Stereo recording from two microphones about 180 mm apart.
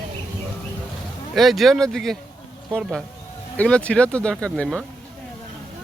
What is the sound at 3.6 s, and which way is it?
Speech, 5° left (ahead or behind).